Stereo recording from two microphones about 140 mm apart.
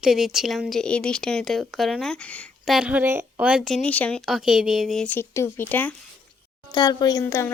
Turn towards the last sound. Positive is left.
turn(degrees=15)  # may be behind; listen again after turning